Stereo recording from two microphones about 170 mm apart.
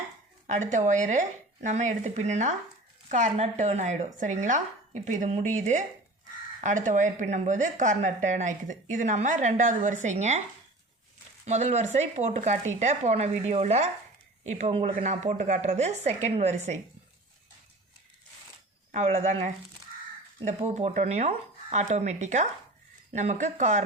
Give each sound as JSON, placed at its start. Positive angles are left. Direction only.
{"t": 0.4, "sound": "a woman's voice", "side_deg": -45}
{"t": 11.4, "sound": "a woman's voice", "side_deg": -40}
{"t": 18.9, "sound": "a woman's voice", "side_deg": -45}
{"t": 20.5, "sound": "a woman's voice", "side_deg": -40}